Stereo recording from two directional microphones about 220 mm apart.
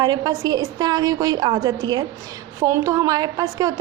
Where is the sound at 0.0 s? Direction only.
20° right (ahead or behind).